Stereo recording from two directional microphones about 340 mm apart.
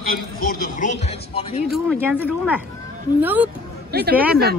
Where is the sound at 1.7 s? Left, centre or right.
Centre.